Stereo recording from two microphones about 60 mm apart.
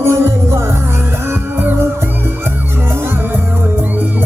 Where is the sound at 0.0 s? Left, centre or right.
Right.